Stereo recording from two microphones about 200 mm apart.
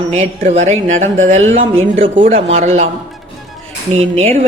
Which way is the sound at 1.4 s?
80° right.